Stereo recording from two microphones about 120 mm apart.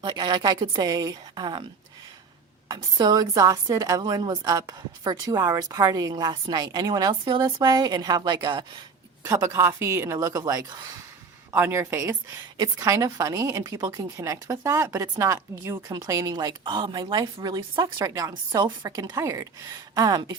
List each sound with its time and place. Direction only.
0.0 s a woman's voice: 35° right (ahead or behind)
2.6 s a woman's voice: 35° right (ahead or behind)